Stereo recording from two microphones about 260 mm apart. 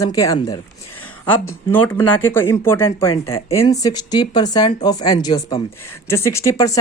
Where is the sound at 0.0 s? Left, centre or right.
Centre.